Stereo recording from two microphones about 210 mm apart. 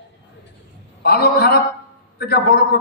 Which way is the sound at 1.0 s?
45° left (ahead or behind).